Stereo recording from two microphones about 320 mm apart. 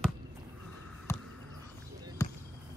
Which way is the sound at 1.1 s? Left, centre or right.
Centre.